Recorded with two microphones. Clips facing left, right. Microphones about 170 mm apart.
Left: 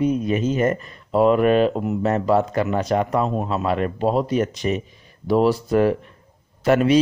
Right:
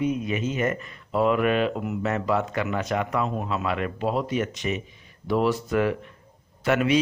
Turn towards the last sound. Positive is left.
turn(degrees=35)  # may be behind; listen again after turning